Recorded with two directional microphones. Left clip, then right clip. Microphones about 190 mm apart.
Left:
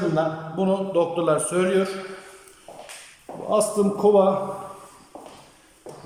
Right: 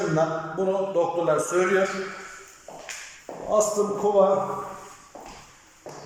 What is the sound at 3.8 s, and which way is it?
Speech, 10° left (ahead or behind).